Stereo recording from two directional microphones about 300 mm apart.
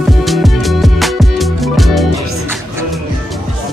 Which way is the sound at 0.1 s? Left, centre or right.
Centre.